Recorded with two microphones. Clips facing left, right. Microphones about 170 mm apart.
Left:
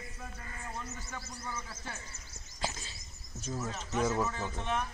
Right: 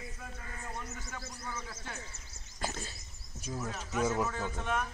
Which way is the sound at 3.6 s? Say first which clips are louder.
Even; centre (ahead or behind).